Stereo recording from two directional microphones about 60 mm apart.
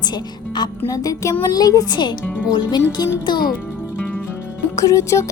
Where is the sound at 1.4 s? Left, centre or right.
Left.